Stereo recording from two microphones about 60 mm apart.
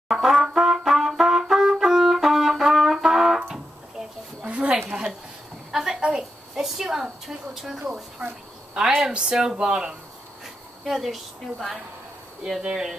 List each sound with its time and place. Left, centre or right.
0.1 s trumpet: centre
4.4 s a sound: centre
8.7 s speech: centre
10.8 s a woman's voice: centre